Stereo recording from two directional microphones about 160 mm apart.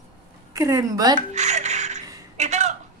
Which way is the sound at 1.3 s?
45° right (ahead or behind).